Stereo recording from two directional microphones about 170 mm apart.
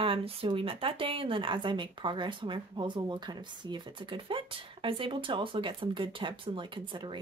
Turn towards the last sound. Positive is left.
turn(degrees=-30)  # may be behind; listen again after turning